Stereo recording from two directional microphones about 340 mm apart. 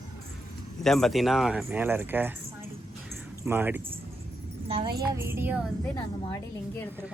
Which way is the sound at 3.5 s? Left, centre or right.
Centre.